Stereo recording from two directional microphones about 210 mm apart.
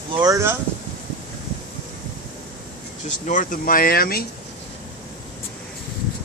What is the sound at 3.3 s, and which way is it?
Speech, 40° left (ahead or behind).